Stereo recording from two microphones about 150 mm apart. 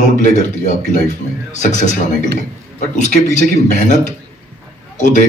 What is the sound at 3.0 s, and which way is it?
Speech, 55° left (ahead or behind).